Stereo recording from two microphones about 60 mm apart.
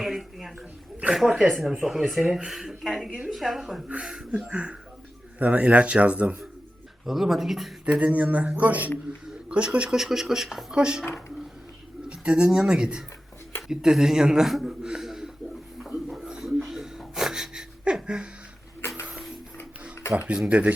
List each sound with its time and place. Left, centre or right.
0.0 s a sound: centre
1.1 s speech: centre
4.5 s speech: centre
7.0 s speech: centre
7.9 s speech: right
10.0 s speech: centre
12.0 s speech: centre
16.2 s wheeze: centre
19.0 s printer: centre
20.1 s speech: centre